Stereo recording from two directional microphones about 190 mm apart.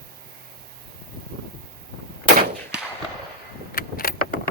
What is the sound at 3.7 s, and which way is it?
Vehicle, 50° left (ahead or behind).